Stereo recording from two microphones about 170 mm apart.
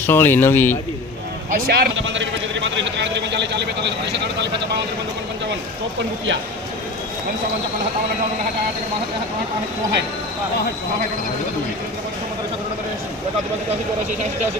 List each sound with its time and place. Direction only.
0.0 s speech: 15° left (ahead or behind)
1.5 s a man's voice: 55° right (ahead or behind); by 4.4 s 90° right